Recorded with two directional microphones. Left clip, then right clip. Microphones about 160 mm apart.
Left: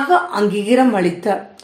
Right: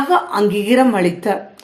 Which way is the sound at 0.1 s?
30° right (ahead or behind).